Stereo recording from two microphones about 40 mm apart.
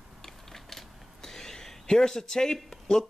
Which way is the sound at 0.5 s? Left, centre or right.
Centre.